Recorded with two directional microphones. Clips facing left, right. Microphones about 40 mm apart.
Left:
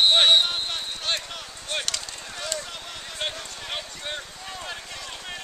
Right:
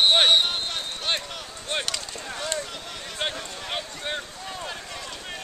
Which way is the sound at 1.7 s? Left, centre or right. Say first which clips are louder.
Right 1 dB; centre.